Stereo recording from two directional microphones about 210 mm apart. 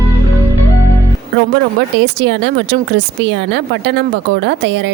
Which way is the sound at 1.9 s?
55° right (ahead or behind).